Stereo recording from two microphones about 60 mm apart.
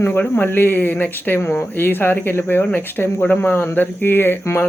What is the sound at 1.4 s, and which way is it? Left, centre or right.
Speech, left.